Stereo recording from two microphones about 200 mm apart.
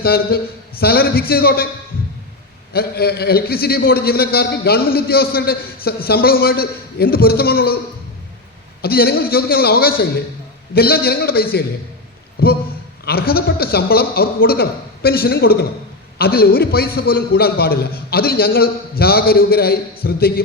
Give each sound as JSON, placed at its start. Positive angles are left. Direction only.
{"t": 0.0, "sound": "a man's voice", "side_deg": 50}
{"t": 2.7, "sound": "a man's voice", "side_deg": 50}
{"t": 8.8, "sound": "a man's voice", "side_deg": 50}